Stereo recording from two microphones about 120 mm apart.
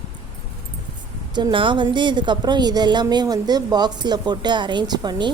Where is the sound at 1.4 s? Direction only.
45° right (ahead or behind).